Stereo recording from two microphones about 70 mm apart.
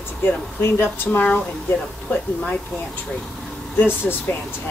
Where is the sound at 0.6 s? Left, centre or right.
Left; by 2.6 s centre.